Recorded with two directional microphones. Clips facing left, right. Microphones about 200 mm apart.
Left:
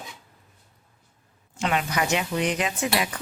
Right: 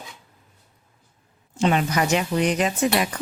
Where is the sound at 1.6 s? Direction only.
35° right (ahead or behind).